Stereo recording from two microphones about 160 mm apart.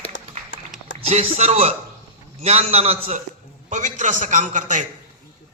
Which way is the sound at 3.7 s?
50° right (ahead or behind).